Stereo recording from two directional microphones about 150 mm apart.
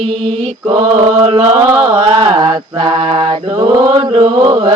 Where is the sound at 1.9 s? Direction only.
35° right (ahead or behind).